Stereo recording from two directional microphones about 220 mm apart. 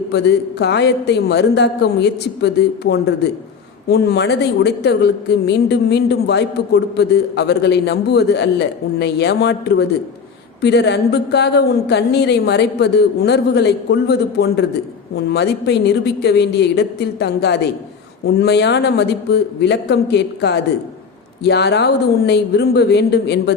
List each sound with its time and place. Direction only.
0.1 s a woman's voice: 50° left (ahead or behind)